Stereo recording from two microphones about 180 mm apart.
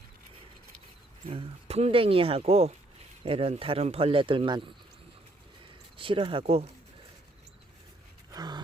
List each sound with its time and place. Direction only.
1.3 s speech: 35° right (ahead or behind)
6.0 s speech: 30° right (ahead or behind)
8.3 s gasp: 25° right (ahead or behind)